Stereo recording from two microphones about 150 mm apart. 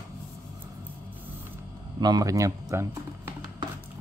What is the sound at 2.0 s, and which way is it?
Speech, 25° right (ahead or behind).